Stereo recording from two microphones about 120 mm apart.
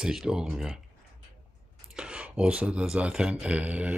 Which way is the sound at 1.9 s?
5° right (ahead or behind).